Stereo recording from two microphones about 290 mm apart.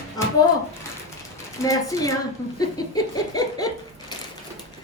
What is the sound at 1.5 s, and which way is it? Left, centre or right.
Speech, centre.